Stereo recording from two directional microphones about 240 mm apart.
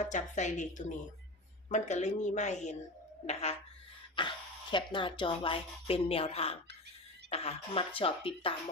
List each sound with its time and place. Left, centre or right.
0.0 s a woman's voice: left